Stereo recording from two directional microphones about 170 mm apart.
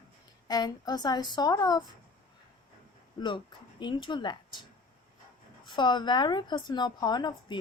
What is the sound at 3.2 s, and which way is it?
A woman's voice, 25° left (ahead or behind).